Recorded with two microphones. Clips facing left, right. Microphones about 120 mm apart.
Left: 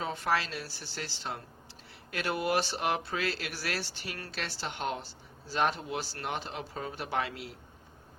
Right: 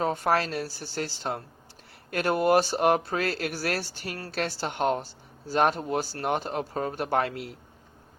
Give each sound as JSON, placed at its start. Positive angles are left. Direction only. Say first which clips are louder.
{"t": 0.0, "sound": "speech", "louder": "right 6 dB", "side_deg": -50}